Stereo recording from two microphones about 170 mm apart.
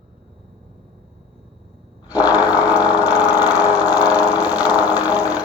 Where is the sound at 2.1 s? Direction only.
20° left (ahead or behind).